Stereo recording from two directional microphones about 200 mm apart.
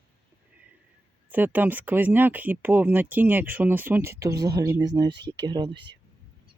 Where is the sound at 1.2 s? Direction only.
10° right (ahead or behind).